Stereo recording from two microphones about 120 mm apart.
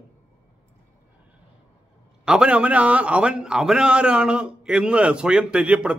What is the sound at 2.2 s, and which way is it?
A man's voice, 5° right (ahead or behind).